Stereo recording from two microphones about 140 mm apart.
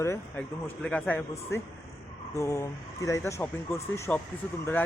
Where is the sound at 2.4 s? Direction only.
20° left (ahead or behind).